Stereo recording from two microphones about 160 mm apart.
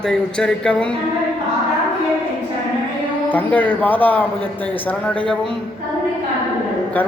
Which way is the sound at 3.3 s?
10° left (ahead or behind).